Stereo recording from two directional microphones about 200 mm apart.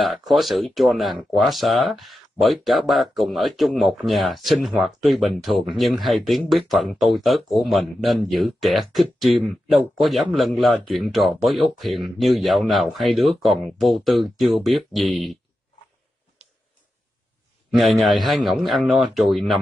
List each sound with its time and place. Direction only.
0.0 s speech: centre (ahead or behind)
17.6 s speech: centre (ahead or behind)